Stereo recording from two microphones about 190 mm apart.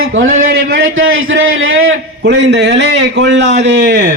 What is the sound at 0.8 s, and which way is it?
A man's voice, 90° right.